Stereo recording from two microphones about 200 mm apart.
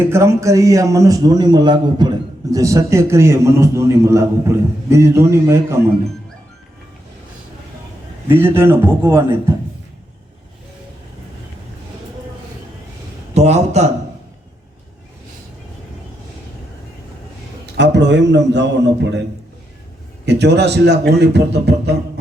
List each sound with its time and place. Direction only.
0.0 s a man's voice: 15° right (ahead or behind)
8.3 s a man's voice: 10° right (ahead or behind)
13.3 s a man's voice: 35° right (ahead or behind)
17.7 s speech: 60° right (ahead or behind)
20.2 s speech: 55° right (ahead or behind)